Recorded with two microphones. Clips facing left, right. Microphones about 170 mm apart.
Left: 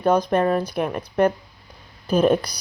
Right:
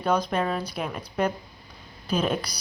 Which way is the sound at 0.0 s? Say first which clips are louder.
Left 6 dB; 50° left (ahead or behind).